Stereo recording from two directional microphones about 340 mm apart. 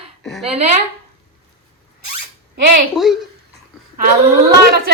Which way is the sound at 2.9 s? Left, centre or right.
Centre.